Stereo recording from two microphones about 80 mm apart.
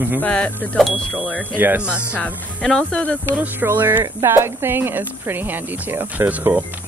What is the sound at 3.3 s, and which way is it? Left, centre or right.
Speech, right.